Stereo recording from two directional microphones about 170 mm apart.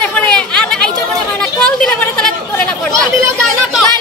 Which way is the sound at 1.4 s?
5° left (ahead or behind).